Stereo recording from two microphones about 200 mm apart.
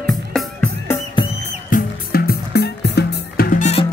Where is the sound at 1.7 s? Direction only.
50° left (ahead or behind); by 3.9 s 35° left (ahead or behind).